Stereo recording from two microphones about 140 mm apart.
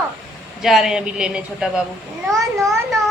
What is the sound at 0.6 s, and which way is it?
A woman's voice, 5° right (ahead or behind).